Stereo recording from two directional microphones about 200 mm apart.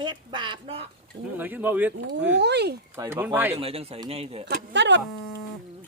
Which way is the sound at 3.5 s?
30° right (ahead or behind).